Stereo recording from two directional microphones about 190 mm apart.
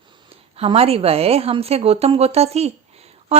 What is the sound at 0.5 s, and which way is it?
A woman's voice, 30° right (ahead or behind).